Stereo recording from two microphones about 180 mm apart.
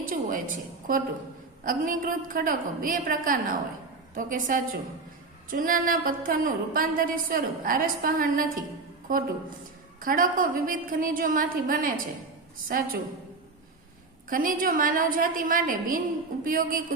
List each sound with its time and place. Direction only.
0.0 s a woman's voice: 50° right (ahead or behind)
10.0 s a woman's voice: 50° right (ahead or behind)
14.3 s a woman's voice: 50° right (ahead or behind)